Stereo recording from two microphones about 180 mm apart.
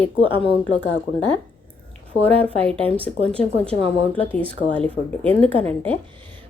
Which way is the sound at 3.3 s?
5° left (ahead or behind).